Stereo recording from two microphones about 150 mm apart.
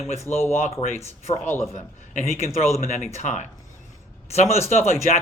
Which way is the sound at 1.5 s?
20° left (ahead or behind).